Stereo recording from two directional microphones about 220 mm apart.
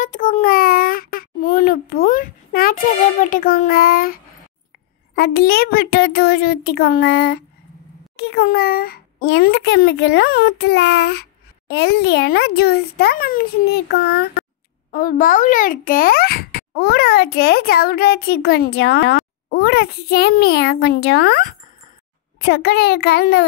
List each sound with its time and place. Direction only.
0.0 s child singing: 35° left (ahead or behind)
5.1 s a child's voice: 45° left (ahead or behind)